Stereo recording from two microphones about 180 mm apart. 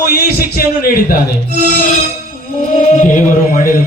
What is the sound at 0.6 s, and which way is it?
Speech, 55° left (ahead or behind).